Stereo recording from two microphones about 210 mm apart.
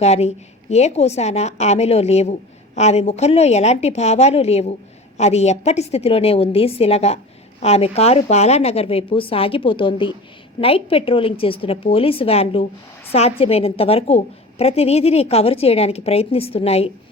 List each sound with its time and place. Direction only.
0.0 s a woman's voice: 30° left (ahead or behind)